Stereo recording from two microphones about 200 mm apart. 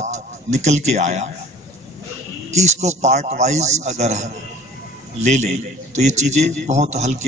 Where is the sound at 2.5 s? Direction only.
35° right (ahead or behind).